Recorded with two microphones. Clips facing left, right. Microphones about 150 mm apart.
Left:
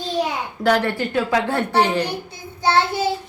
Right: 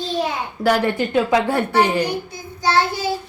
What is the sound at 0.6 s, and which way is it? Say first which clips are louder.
A woman's voice: right 1 dB; 10° right (ahead or behind).